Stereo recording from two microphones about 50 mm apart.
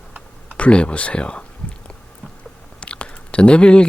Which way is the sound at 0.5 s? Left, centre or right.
Left.